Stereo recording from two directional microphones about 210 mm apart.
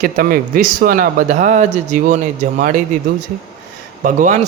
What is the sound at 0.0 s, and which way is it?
Speech, 45° right (ahead or behind).